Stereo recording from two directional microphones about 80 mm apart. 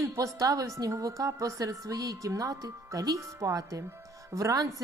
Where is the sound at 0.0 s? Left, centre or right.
Right.